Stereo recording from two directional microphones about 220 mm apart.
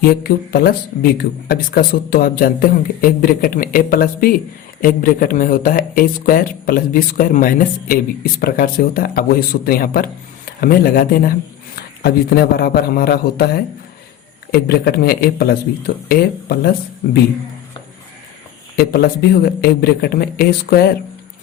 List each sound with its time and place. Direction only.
0.0 s speech: 45° left (ahead or behind)
14.5 s speech: 45° left (ahead or behind)
18.8 s speech: 45° left (ahead or behind)